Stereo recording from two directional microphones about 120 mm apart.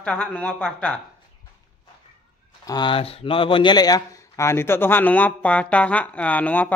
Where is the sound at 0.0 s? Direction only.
10° left (ahead or behind).